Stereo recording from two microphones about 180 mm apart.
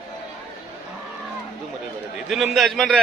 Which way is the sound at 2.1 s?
Centre (ahead or behind).